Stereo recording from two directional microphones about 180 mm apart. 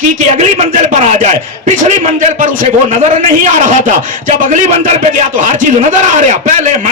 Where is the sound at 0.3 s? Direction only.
40° right (ahead or behind).